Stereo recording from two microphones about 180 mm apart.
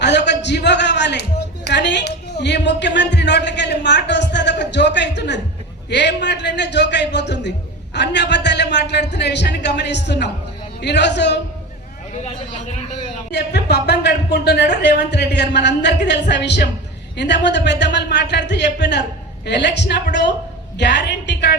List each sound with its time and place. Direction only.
0.0 s a sound: 70° left (ahead or behind)
5.9 s speech: 70° left (ahead or behind)
13.3 s speech: 70° left (ahead or behind)